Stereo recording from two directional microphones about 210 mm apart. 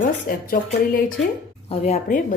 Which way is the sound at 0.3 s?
45° left (ahead or behind).